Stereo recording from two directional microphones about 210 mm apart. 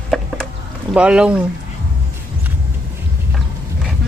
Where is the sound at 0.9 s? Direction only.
5° right (ahead or behind).